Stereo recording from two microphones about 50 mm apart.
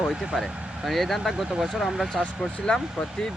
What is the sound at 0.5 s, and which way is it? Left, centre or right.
Vehicle, right.